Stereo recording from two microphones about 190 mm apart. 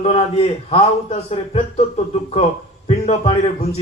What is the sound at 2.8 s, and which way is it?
Speech, 35° left (ahead or behind).